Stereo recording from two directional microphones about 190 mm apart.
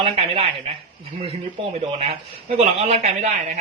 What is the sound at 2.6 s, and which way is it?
Speech, 35° right (ahead or behind).